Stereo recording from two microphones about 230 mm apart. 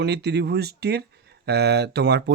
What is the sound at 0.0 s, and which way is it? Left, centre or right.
Speech, right.